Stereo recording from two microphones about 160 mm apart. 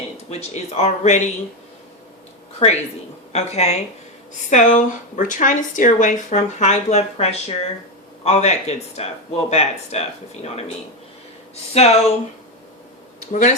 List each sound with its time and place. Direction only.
0.3 s speech: 45° left (ahead or behind)
2.6 s speech: 35° left (ahead or behind)
11.7 s speech: 40° left (ahead or behind)
13.1 s speech: 50° left (ahead or behind)